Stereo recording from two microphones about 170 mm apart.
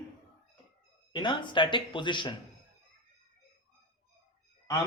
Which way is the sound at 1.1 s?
30° left (ahead or behind).